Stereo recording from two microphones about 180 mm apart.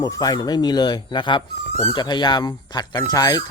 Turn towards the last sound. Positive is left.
turn(degrees=20)  # may be behind; listen again after turning